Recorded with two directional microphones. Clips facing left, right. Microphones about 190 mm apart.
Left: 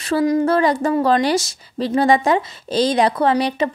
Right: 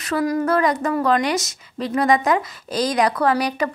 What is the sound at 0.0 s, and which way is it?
A woman's voice, 25° left (ahead or behind).